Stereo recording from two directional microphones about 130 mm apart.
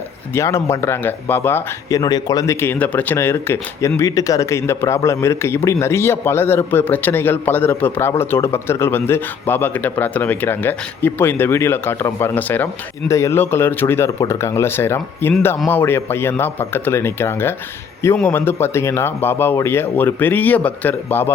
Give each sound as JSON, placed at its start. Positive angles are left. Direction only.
{"t": 0.3, "sound": "speech", "side_deg": 20}
{"t": 1.9, "sound": "speech", "side_deg": 30}